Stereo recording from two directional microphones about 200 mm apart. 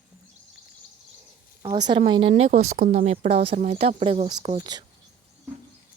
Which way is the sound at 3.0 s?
30° right (ahead or behind).